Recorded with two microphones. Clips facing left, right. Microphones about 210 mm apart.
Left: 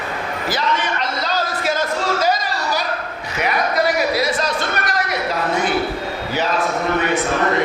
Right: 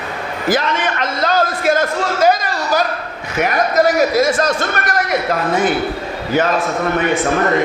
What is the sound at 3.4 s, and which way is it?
A man's voice, 45° right (ahead or behind).